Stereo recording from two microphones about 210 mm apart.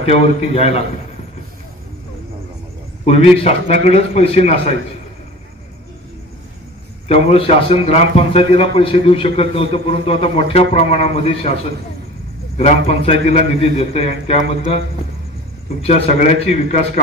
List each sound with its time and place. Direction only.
0.0 s a man's voice: 30° left (ahead or behind)
3.1 s a man's voice: 30° left (ahead or behind)
7.1 s a man's voice: 30° left (ahead or behind)
15.8 s a man's voice: 30° left (ahead or behind)